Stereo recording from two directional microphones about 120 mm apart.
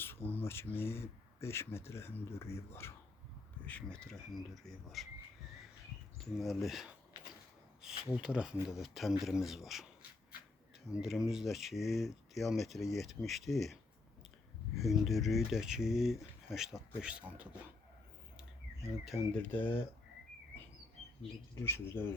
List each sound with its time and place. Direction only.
0.0 s speech: 15° left (ahead or behind)
3.7 s speech: 10° left (ahead or behind)
6.3 s speech: centre (ahead or behind)
10.9 s speech: 5° right (ahead or behind)
14.8 s speech: centre (ahead or behind)
19.3 s speech: 15° left (ahead or behind)
21.5 s speech: 20° left (ahead or behind)